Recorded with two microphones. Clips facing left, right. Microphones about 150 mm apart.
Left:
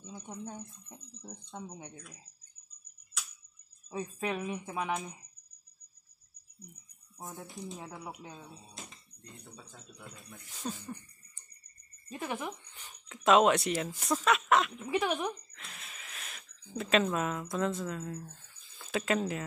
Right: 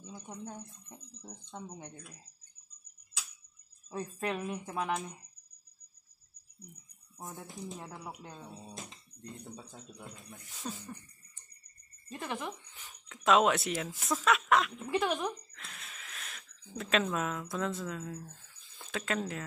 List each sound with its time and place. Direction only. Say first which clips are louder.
0.0 s speech: left 1 dB; 5° left (ahead or behind)
3.9 s speech: left 1 dB; centre (ahead or behind)
7.2 s speech: even; 5° left (ahead or behind)
9.4 s speech: right 4 dB; 25° right (ahead or behind)
10.6 s speech: left 2 dB; 5° left (ahead or behind)
12.1 s speech: left 1 dB; 5° left (ahead or behind)